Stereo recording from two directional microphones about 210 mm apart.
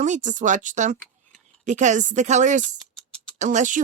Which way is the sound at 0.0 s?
35° right (ahead or behind).